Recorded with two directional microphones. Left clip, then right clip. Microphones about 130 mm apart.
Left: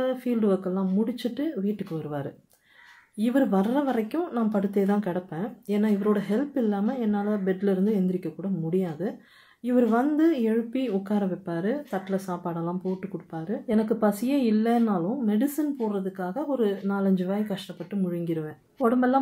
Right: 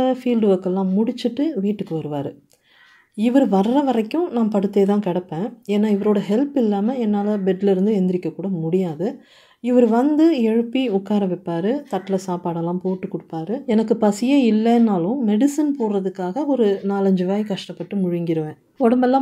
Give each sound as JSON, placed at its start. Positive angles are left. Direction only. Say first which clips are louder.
{"t": 0.0, "sound": "speech", "louder": "right 7 dB", "side_deg": -35}